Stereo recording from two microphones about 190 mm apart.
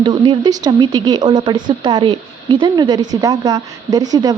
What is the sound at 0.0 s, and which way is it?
Speech, 25° right (ahead or behind).